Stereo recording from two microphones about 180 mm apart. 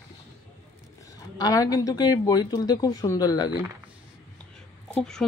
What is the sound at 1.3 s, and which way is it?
Speech, 20° left (ahead or behind).